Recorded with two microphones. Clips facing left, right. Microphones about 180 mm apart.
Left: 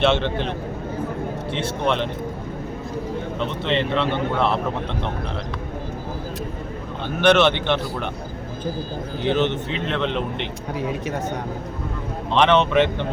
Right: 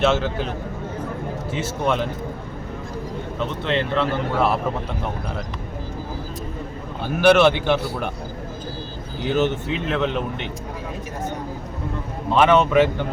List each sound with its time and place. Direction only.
0.0 s speech: 5° right (ahead or behind)
1.5 s a man's voice: 5° right (ahead or behind)
3.6 s speech: centre (ahead or behind)
7.2 s a man's voice: 5° right (ahead or behind)
9.3 s speech: 5° right (ahead or behind)
12.3 s a man's voice: 5° right (ahead or behind)